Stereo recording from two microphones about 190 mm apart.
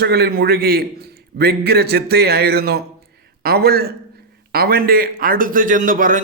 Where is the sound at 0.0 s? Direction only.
55° right (ahead or behind).